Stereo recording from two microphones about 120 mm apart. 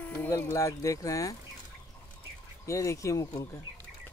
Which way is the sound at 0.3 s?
25° left (ahead or behind).